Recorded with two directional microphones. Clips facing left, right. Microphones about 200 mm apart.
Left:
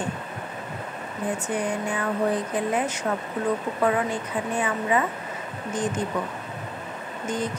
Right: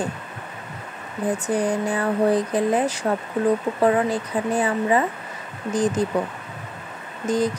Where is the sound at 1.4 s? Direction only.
35° right (ahead or behind).